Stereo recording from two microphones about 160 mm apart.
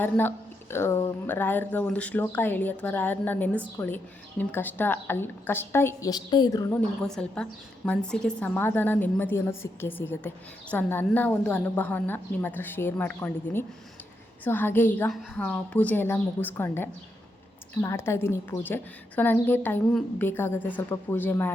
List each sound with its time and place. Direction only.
0.0 s a woman's voice: 15° left (ahead or behind)
7.0 s a woman's voice: 5° left (ahead or behind)